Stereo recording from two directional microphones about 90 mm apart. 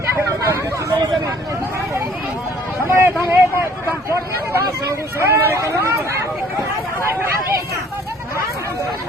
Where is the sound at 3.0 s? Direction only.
20° right (ahead or behind).